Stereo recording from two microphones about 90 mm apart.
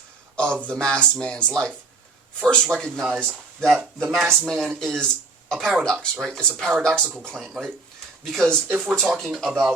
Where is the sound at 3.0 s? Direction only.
20° right (ahead or behind).